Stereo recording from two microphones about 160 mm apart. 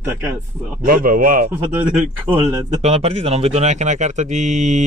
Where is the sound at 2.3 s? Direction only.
15° right (ahead or behind).